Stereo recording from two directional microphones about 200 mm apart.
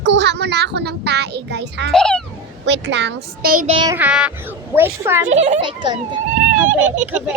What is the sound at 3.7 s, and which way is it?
Speech, 25° right (ahead or behind).